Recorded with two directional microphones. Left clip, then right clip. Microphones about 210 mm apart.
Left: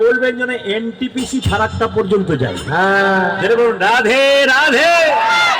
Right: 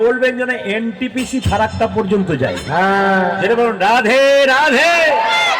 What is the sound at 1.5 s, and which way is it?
A man's voice, 40° right (ahead or behind).